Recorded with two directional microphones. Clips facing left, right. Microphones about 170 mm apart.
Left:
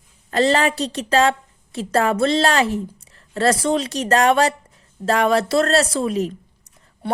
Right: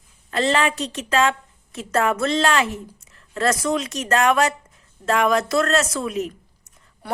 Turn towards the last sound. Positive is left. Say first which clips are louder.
# left 4 dB
turn(degrees=25)  # may be behind; listen again after turning